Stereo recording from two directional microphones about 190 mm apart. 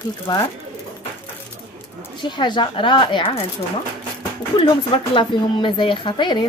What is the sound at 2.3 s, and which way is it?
Speech, 25° left (ahead or behind).